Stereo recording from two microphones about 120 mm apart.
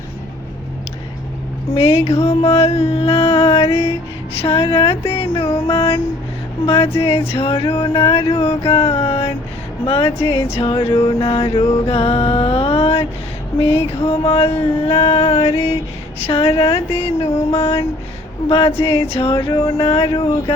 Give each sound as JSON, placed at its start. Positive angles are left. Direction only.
{"t": 2.0, "sound": "music", "side_deg": 60}
{"t": 15.5, "sound": "a sound", "side_deg": 25}
{"t": 16.2, "sound": "music", "side_deg": 55}